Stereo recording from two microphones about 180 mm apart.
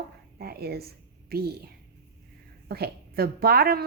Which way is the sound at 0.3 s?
60° right (ahead or behind).